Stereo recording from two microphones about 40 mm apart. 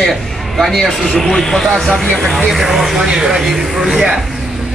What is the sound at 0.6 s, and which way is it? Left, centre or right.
A man's voice, centre.